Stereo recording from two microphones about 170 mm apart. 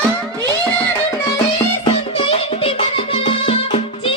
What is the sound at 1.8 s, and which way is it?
Music, 35° left (ahead or behind).